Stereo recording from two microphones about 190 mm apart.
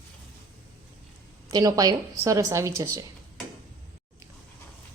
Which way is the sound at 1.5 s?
20° right (ahead or behind).